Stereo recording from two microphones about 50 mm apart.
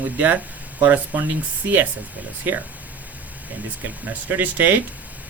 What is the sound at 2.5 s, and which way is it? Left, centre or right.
Speech, right.